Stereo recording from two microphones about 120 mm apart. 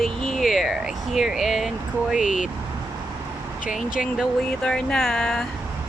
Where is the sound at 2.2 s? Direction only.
90° left.